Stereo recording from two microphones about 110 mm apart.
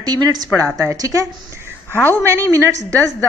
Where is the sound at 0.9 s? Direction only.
30° right (ahead or behind).